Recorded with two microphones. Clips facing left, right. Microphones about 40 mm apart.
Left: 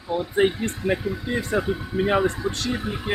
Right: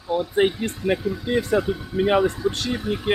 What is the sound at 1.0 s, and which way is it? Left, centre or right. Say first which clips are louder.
Speech: right 3 dB; centre.